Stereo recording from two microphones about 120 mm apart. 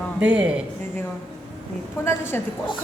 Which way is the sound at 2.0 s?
20° left (ahead or behind).